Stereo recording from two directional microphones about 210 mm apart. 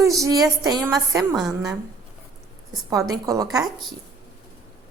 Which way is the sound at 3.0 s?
15° right (ahead or behind).